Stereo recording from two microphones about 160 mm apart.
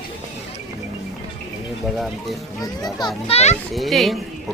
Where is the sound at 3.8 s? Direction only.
Centre (ahead or behind).